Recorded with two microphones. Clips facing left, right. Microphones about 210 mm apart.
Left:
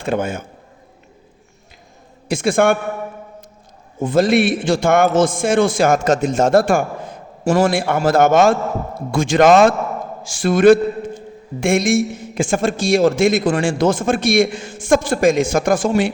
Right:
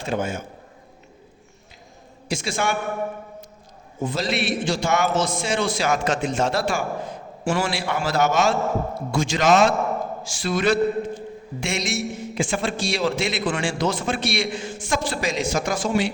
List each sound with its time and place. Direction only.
0.0 s a man's voice: 55° left (ahead or behind)
2.3 s a man's voice: 55° left (ahead or behind)
4.0 s a man's voice: 50° left (ahead or behind)